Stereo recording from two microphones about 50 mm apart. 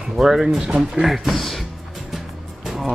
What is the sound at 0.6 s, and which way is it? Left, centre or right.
Speech, right.